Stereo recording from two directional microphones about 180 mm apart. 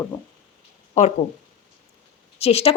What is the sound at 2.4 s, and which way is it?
Speech, 35° left (ahead or behind).